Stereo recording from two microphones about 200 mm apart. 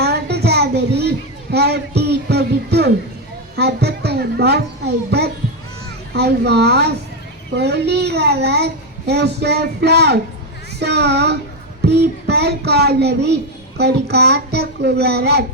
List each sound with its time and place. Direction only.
0.0 s child singing: 55° right (ahead or behind)
3.5 s a child's voice: 55° right (ahead or behind)